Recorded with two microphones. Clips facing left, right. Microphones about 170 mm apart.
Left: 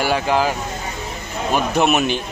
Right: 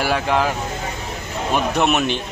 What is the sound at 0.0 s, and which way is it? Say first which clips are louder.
Speech: left 1 dB; centre (ahead or behind).